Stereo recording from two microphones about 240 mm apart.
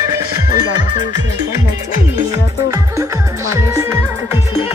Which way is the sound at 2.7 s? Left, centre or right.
Centre.